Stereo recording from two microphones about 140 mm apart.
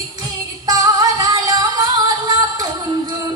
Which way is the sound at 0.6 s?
25° right (ahead or behind).